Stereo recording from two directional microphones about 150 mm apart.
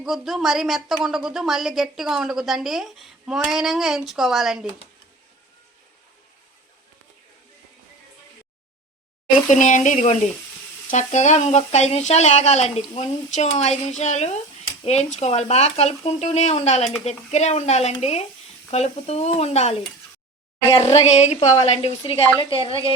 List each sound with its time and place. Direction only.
0.0 s a woman's voice: centre (ahead or behind)
9.5 s speech: 55° left (ahead or behind)
20.7 s a woman's voice: 40° left (ahead or behind)